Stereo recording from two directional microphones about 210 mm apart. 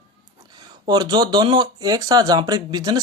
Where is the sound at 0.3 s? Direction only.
20° right (ahead or behind).